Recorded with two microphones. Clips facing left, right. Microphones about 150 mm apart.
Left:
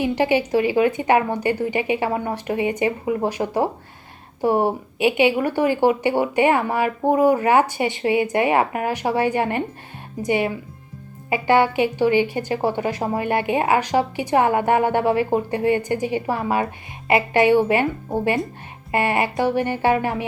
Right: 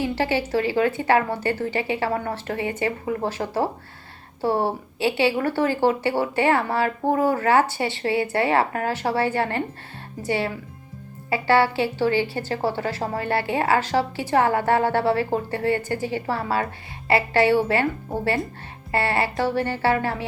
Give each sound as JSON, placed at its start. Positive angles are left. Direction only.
{"t": 0.0, "sound": "speech", "side_deg": 15}